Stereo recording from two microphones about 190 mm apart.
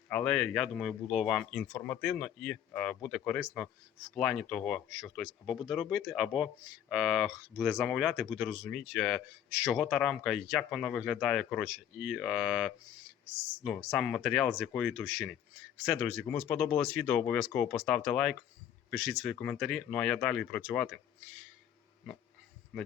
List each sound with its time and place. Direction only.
0.1 s speech: 5° left (ahead or behind)